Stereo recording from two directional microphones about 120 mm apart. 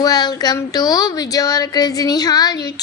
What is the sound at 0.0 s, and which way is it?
A woman's voice, 35° left (ahead or behind).